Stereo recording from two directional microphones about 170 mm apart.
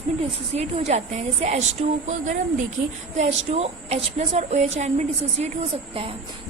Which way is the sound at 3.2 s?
40° right (ahead or behind).